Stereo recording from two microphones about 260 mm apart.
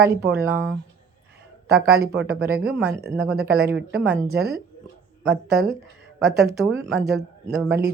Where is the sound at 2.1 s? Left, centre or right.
Right.